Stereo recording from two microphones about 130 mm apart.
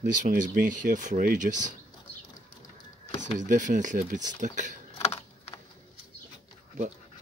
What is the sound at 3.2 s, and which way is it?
Speech, 75° right (ahead or behind).